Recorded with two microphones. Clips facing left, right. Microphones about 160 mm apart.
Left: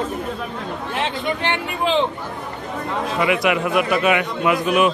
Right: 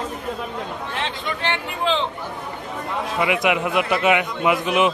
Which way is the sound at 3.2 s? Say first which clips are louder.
Left 1 dB; 15° right (ahead or behind).